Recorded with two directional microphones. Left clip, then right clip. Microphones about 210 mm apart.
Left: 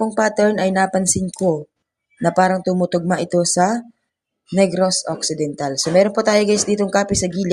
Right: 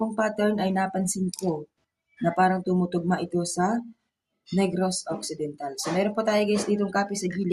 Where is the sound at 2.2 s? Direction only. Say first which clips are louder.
Left 7 dB; 35° left (ahead or behind).